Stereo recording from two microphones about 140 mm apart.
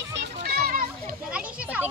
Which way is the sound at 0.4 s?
90° right.